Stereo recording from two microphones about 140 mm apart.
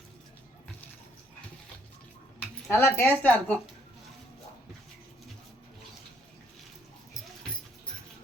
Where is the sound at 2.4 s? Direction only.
20° left (ahead or behind).